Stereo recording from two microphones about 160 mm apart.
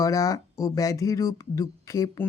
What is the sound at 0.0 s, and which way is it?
Speech, 20° left (ahead or behind).